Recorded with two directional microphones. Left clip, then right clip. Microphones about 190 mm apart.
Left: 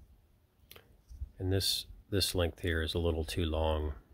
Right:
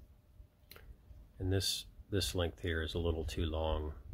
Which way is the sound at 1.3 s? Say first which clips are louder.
Left 4 dB; 35° left (ahead or behind).